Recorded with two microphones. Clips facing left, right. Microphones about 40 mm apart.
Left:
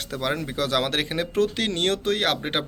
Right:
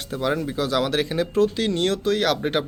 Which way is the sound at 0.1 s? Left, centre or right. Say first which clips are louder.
Right 4 dB; left.